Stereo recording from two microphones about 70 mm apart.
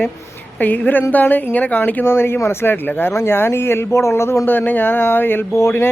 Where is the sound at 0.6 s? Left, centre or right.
Left.